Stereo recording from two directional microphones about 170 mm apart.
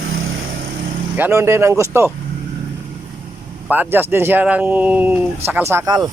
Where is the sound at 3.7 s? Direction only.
10° right (ahead or behind).